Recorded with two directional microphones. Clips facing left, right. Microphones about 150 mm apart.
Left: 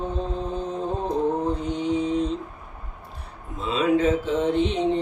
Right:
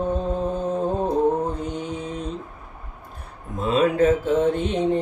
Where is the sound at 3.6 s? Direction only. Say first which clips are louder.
Right 3 dB; 50° right (ahead or behind).